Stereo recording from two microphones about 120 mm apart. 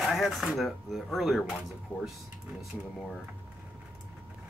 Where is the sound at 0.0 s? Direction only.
Centre (ahead or behind).